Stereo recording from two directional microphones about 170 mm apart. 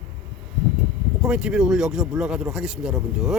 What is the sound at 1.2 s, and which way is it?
Speech, 5° right (ahead or behind).